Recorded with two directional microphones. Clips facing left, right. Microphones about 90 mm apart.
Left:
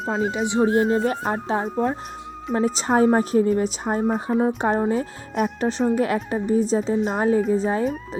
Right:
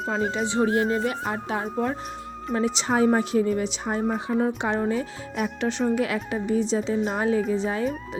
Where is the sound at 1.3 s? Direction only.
30° left (ahead or behind).